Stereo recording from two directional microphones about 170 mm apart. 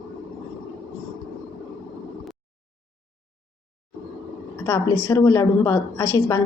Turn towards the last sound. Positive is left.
turn(degrees=15)  # may be behind; listen again after turning